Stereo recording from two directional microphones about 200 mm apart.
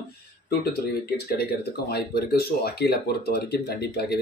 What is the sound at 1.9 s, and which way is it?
Speech, 50° left (ahead or behind).